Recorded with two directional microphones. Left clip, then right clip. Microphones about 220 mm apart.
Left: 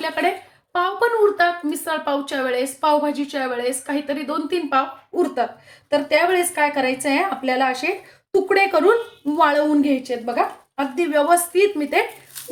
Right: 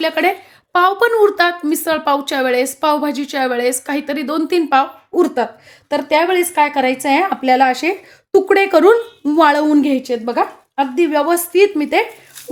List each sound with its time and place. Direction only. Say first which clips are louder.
0.0 s a woman's voice: right 6 dB; 45° right (ahead or behind)